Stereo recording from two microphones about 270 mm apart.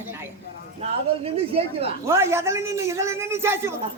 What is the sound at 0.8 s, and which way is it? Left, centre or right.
A woman's voice, right.